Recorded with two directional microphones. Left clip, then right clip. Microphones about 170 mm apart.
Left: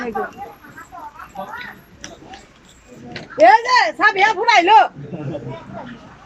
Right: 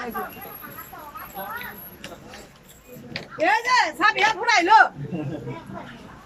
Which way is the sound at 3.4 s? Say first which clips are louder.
Left 8 dB; 35° left (ahead or behind).